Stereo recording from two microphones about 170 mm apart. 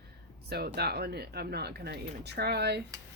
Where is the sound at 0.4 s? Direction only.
70° right (ahead or behind).